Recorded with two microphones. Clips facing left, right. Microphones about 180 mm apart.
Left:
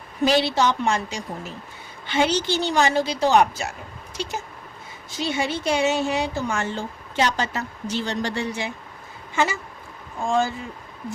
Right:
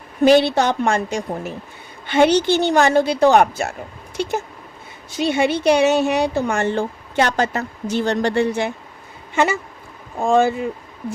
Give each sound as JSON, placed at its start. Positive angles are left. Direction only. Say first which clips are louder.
{"t": 0.2, "sound": "a woman's voice", "louder": "right 6 dB", "side_deg": -55}
{"t": 9.3, "sound": "a sound", "louder": "right 5 dB", "side_deg": -60}
{"t": 10.2, "sound": "a woman's voice", "louder": "right 7 dB", "side_deg": -60}